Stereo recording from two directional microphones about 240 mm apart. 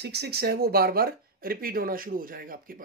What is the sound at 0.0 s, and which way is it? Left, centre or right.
Speech, right.